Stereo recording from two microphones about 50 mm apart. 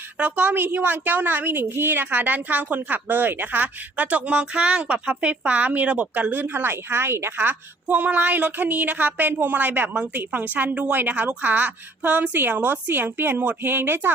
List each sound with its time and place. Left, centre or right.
0.2 s speech: right